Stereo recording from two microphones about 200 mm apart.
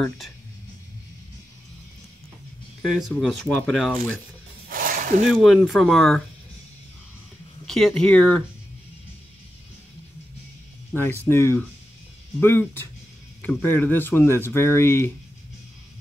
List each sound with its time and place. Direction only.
2.8 s speech: centre (ahead or behind)
4.6 s snake: 45° right (ahead or behind)
5.3 s speech: centre (ahead or behind)
7.6 s speech: centre (ahead or behind)
10.9 s speech: 10° left (ahead or behind)